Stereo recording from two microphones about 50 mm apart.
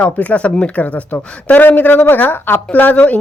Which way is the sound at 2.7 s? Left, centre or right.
Left.